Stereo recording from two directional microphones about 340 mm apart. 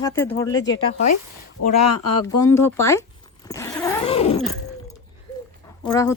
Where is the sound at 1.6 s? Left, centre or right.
Left.